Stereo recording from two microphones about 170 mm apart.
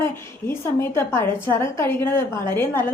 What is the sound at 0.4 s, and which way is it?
A woman's voice, 15° left (ahead or behind).